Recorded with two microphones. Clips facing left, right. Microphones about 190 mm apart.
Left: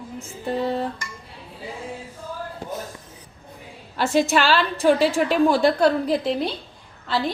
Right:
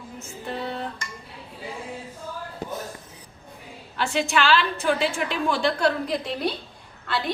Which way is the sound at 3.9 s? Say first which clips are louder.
Left 4 dB; 40° left (ahead or behind).